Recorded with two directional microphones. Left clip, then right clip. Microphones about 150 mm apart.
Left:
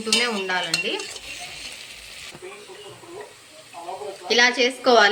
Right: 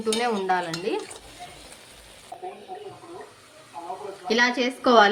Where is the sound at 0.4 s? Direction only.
40° right (ahead or behind).